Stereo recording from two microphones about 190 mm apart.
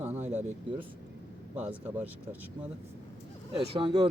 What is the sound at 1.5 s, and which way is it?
Speech, 10° right (ahead or behind).